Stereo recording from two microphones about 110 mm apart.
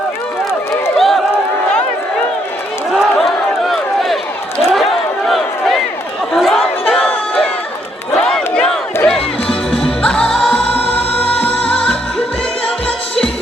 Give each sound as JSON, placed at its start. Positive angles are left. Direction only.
{"t": 0.9, "sound": "run", "side_deg": 0}
{"t": 2.9, "sound": "run", "side_deg": 0}
{"t": 4.7, "sound": "crowd", "side_deg": 0}
{"t": 9.0, "sound": "music", "side_deg": 5}